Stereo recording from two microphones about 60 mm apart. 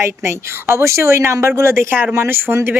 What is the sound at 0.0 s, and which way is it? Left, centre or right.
A woman's voice, right.